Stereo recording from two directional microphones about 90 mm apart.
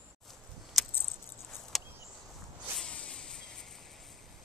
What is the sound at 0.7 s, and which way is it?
Keys jangling, centre (ahead or behind).